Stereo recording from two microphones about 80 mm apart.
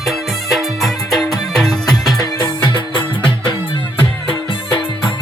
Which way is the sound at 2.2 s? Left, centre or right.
Left.